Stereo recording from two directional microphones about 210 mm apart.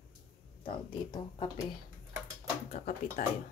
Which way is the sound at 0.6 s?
25° left (ahead or behind).